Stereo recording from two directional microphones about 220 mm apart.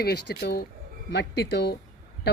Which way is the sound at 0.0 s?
50° left (ahead or behind).